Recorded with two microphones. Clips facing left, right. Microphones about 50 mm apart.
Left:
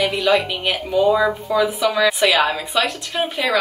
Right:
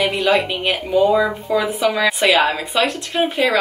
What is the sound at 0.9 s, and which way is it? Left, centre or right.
Speech, centre.